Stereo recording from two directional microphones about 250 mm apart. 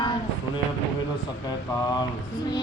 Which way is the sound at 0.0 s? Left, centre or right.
Centre.